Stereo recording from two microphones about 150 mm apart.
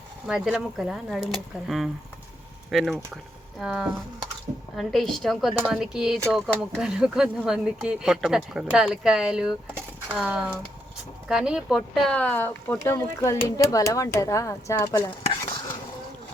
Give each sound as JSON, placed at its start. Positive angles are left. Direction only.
{"t": 0.3, "sound": "speech", "side_deg": -5}
{"t": 12.1, "sound": "speech", "side_deg": 10}